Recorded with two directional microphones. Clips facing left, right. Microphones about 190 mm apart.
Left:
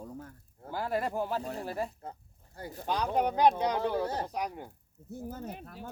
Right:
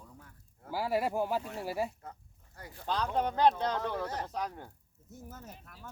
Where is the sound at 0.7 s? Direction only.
5° right (ahead or behind).